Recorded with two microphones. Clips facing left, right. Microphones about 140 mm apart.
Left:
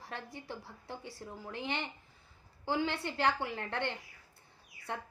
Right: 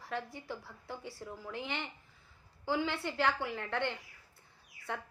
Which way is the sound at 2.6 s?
20° left (ahead or behind).